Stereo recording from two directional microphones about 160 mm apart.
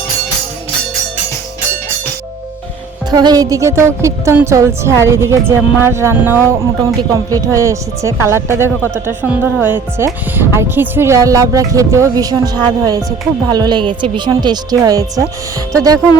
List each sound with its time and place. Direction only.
3.1 s speech: 25° right (ahead or behind)